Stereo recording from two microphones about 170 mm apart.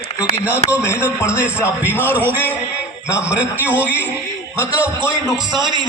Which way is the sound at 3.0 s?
5° right (ahead or behind).